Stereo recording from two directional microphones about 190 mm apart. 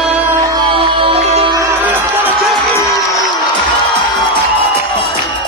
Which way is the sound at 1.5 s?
10° right (ahead or behind).